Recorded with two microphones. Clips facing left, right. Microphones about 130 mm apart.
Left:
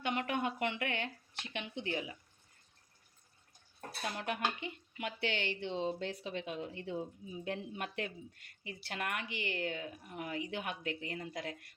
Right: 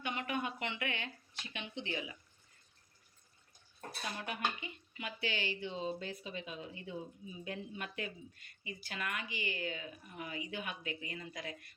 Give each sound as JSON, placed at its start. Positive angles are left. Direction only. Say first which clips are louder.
{"t": 0.0, "sound": "speech", "louder": "left 3 dB", "side_deg": 65}
{"t": 4.0, "sound": "speech", "louder": "left 3 dB", "side_deg": 60}